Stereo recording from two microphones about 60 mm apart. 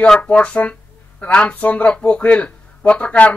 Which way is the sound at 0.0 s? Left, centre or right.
Centre.